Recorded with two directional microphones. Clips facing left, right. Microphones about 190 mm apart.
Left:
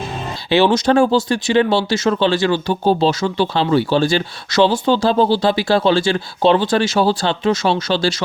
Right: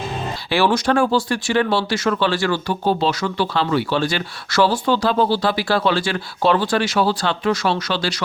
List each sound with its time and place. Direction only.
0.5 s speech: 20° left (ahead or behind)